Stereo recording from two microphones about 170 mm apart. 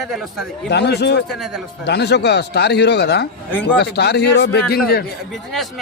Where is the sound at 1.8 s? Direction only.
80° left.